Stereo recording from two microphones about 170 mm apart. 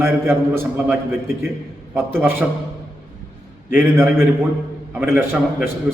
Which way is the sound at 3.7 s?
15° right (ahead or behind).